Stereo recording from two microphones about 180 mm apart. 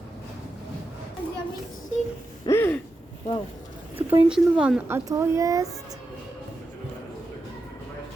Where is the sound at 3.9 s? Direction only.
5° right (ahead or behind).